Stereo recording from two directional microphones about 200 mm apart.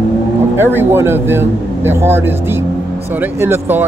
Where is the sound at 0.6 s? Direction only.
10° right (ahead or behind).